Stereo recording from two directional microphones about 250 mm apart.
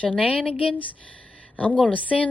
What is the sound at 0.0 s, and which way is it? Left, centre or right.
A woman's voice, centre.